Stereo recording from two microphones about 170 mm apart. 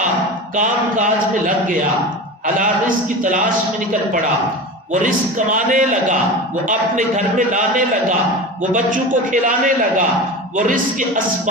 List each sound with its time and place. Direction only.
0.5 s a man's voice: 50° right (ahead or behind)
4.9 s a man's voice: 50° right (ahead or behind)